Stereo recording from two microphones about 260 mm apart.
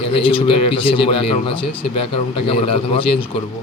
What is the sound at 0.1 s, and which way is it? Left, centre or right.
Speech, left.